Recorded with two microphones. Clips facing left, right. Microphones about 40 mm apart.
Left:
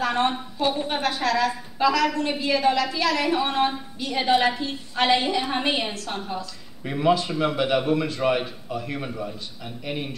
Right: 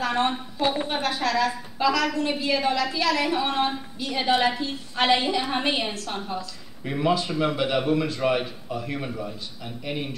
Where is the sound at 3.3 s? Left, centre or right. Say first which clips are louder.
Left 2 dB; centre.